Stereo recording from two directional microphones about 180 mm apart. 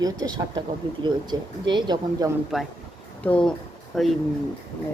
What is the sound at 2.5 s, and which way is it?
Speech, centre (ahead or behind).